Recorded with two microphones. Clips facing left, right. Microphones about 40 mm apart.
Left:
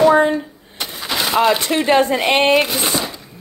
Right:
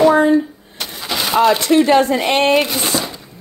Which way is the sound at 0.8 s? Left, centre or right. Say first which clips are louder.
Even; centre.